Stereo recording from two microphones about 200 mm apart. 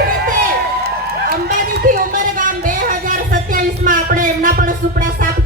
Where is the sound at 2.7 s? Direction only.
45° right (ahead or behind).